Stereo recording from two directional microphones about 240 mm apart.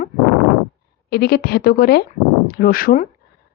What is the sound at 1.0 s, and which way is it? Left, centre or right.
Speech, left.